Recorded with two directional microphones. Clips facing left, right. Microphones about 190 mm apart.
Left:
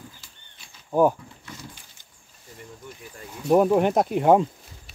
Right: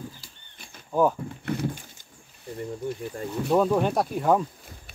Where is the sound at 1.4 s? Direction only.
60° right (ahead or behind).